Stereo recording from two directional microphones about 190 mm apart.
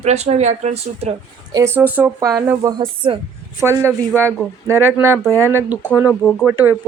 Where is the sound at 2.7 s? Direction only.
25° right (ahead or behind).